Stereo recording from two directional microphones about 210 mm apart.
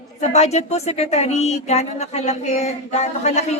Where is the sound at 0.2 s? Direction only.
30° left (ahead or behind).